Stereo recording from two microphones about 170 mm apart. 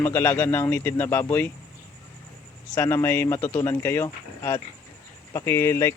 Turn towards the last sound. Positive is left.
turn(degrees=15)  # may be behind; listen again after turning